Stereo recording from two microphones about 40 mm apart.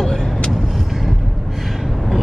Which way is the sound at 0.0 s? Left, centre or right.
Centre.